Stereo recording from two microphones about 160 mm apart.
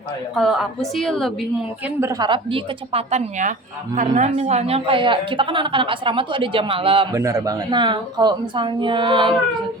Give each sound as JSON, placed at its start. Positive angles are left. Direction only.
{"t": 0.3, "sound": "a woman's voice", "side_deg": 0}
{"t": 2.0, "sound": "a woman's voice", "side_deg": -20}
{"t": 7.1, "sound": "speech", "side_deg": -20}